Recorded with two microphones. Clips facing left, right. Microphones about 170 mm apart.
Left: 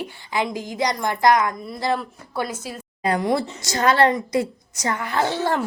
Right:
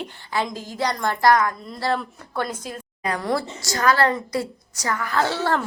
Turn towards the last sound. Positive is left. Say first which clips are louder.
# even
turn(degrees=15)  # may be behind; listen again after turning